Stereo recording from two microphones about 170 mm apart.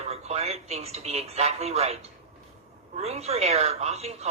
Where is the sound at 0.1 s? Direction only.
40° right (ahead or behind).